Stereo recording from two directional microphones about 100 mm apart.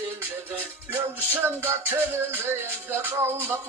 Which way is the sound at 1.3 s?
20° right (ahead or behind).